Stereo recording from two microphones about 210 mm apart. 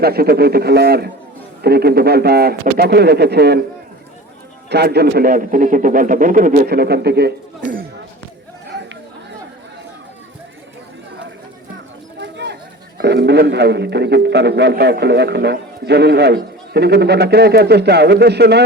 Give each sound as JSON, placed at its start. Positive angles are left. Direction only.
{"t": 0.0, "sound": "speech", "side_deg": -50}
{"t": 4.7, "sound": "a man's voice", "side_deg": -50}
{"t": 12.2, "sound": "chatter", "side_deg": -55}
{"t": 13.0, "sound": "speech", "side_deg": -55}